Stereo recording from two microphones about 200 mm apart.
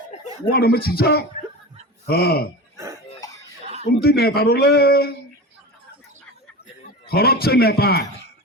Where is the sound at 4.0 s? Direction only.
50° left (ahead or behind).